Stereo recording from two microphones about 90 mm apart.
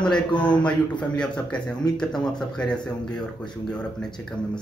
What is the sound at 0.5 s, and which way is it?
Speech, 55° left (ahead or behind).